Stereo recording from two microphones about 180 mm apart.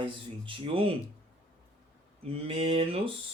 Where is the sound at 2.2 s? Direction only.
35° right (ahead or behind).